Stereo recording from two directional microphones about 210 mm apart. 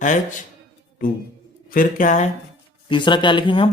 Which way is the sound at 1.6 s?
40° left (ahead or behind).